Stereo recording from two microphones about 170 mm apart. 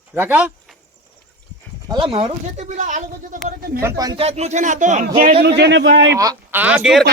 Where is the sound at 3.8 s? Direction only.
20° right (ahead or behind).